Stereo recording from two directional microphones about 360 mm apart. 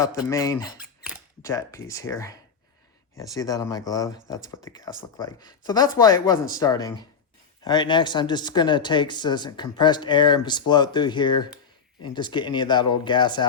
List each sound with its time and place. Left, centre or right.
0.0 s speech: centre
0.8 s a sound: centre
1.4 s speech: centre